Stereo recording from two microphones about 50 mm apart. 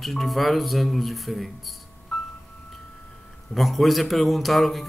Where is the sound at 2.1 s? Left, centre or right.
Centre.